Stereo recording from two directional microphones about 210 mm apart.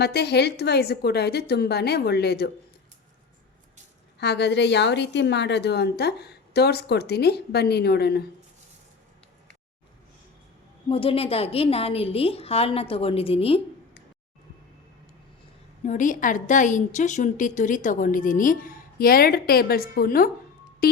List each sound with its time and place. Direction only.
0.0 s a woman's voice: 50° left (ahead or behind)
4.2 s a woman's voice: 50° left (ahead or behind)
10.8 s a woman's voice: 25° left (ahead or behind)
15.8 s a woman's voice: 35° left (ahead or behind)
20.8 s music: 45° left (ahead or behind)